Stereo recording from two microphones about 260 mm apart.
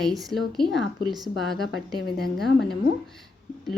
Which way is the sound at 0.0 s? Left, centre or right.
Centre.